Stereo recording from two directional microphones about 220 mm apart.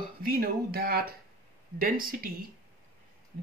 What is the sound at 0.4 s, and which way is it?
Speech, 45° right (ahead or behind).